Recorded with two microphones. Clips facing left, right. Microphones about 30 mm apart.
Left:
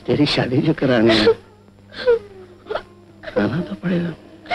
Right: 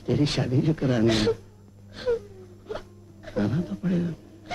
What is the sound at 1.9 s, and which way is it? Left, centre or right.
Wail, left.